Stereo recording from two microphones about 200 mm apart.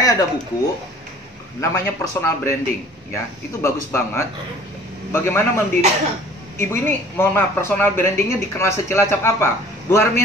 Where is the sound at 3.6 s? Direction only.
15° left (ahead or behind).